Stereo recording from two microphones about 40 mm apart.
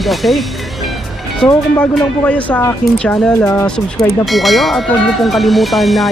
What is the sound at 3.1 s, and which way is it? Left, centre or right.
Speech, centre.